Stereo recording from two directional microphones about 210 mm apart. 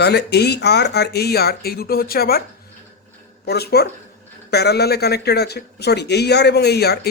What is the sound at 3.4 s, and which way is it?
Speech, 50° left (ahead or behind).